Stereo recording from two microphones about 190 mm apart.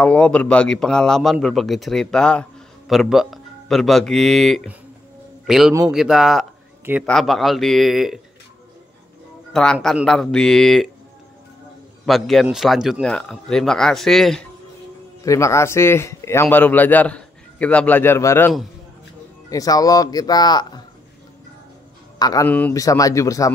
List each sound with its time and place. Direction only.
0.0 s speech: 5° left (ahead or behind)
9.5 s speech: 5° left (ahead or behind)
12.1 s speech: centre (ahead or behind)
15.2 s a man's voice: 15° left (ahead or behind)
19.5 s speech: 20° left (ahead or behind)
22.2 s a man's voice: 20° left (ahead or behind)